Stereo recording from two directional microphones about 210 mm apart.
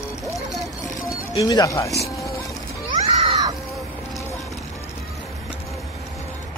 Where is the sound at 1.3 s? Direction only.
15° left (ahead or behind).